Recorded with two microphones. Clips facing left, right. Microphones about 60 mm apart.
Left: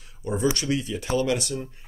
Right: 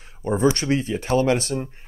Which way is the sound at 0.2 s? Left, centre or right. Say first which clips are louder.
Right 5 dB; right.